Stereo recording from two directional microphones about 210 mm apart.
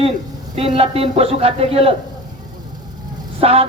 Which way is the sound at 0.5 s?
30° right (ahead or behind).